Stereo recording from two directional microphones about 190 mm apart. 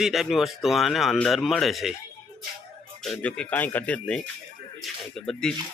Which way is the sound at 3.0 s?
5° left (ahead or behind).